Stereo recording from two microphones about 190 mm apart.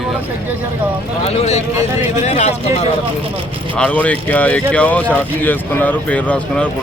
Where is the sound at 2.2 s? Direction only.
35° left (ahead or behind).